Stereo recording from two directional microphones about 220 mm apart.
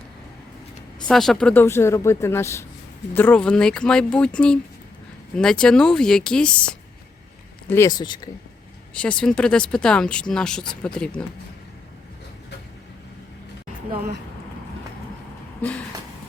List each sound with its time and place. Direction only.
1.0 s speech: centre (ahead or behind)
7.7 s speech: 15° left (ahead or behind)
9.0 s speech: 5° left (ahead or behind)
15.6 s speech: 10° left (ahead or behind)